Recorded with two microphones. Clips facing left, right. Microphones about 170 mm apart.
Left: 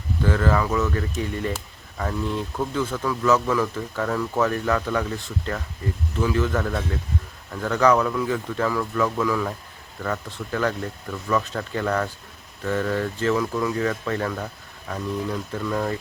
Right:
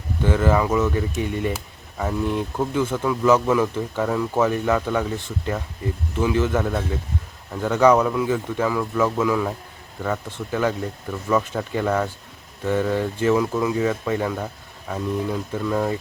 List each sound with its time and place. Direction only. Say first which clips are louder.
0.2 s speech: right 2 dB; 15° right (ahead or behind)